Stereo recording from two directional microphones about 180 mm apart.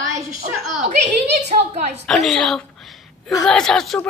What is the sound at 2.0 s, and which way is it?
Speech, centre (ahead or behind).